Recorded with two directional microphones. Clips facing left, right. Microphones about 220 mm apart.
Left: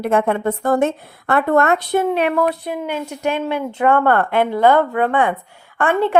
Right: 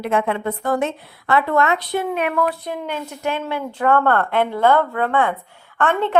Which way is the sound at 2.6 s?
10° left (ahead or behind).